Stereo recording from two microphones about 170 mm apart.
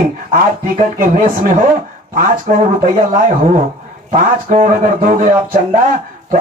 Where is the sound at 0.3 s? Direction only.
55° right (ahead or behind).